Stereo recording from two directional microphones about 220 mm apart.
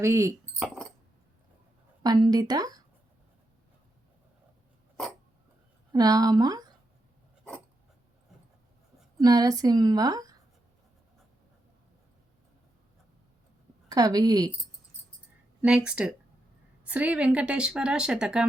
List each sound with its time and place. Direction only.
0.0 s a woman's voice: 10° right (ahead or behind)
2.0 s a woman's voice: 20° right (ahead or behind)
5.9 s a woman's voice: 15° right (ahead or behind)
9.1 s a woman's voice: 15° right (ahead or behind)
13.9 s a woman's voice: 15° right (ahead or behind)
15.6 s speech: 5° right (ahead or behind)